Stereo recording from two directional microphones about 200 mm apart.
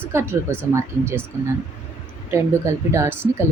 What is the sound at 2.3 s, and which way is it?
Speech, 15° right (ahead or behind).